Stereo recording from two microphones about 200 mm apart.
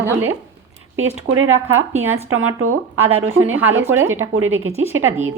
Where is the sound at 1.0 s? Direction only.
85° right.